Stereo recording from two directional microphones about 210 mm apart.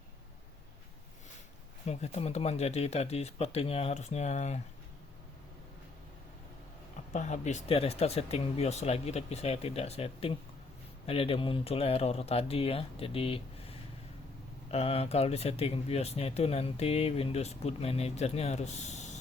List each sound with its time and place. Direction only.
1.9 s speech: 30° left (ahead or behind)
7.1 s speech: 35° left (ahead or behind)